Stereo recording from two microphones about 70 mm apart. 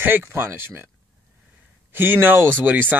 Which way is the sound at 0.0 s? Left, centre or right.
Right.